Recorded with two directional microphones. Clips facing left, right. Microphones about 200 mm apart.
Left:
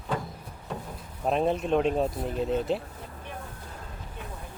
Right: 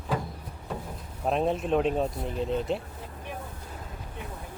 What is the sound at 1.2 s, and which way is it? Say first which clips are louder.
Speech: left 1 dB; centre (ahead or behind).